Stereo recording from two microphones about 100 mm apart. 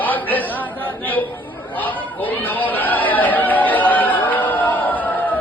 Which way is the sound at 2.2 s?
15° left (ahead or behind).